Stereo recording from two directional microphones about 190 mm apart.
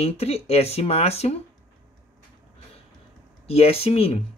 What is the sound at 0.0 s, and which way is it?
Speech, 30° left (ahead or behind).